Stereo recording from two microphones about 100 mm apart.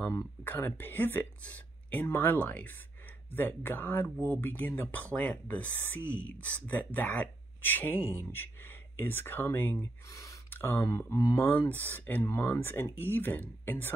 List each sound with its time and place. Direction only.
0.4 s speech: 20° left (ahead or behind)